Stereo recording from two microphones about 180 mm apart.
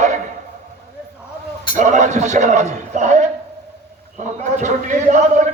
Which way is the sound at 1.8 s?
40° right (ahead or behind).